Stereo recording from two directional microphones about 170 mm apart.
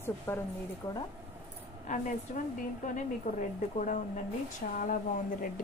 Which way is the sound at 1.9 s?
45° left (ahead or behind).